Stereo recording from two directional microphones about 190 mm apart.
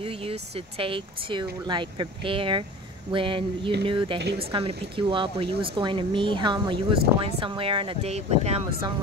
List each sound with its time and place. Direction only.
0.0 s speech: 30° right (ahead or behind)